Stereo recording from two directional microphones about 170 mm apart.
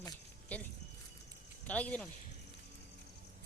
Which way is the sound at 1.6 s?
10° left (ahead or behind).